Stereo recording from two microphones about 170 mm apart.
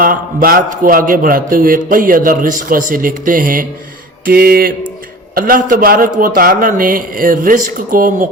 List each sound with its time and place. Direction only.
0.0 s a man's voice: 55° right (ahead or behind)